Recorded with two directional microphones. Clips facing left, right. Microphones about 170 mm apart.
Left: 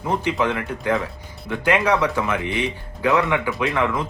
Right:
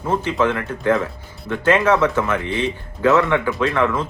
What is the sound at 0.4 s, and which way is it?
Speech, 15° left (ahead or behind).